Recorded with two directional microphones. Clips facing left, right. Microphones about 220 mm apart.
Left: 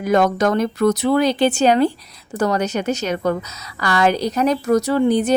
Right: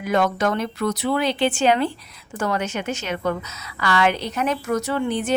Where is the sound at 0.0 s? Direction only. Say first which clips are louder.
Left 4 dB; 40° left (ahead or behind).